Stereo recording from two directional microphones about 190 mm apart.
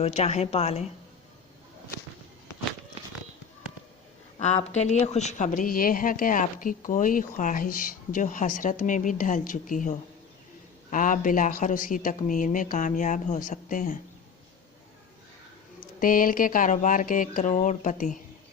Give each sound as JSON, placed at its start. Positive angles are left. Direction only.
{"t": 0.0, "sound": "a woman's voice", "side_deg": 35}
{"t": 4.4, "sound": "speech", "side_deg": 35}
{"t": 16.0, "sound": "speech", "side_deg": 45}